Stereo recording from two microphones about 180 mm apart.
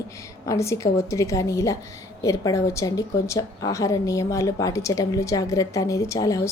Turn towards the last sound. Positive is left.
turn(degrees=20)  # may be behind; listen again after turning